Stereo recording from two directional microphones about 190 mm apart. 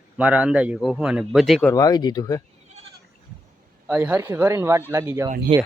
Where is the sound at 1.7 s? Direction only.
20° left (ahead or behind).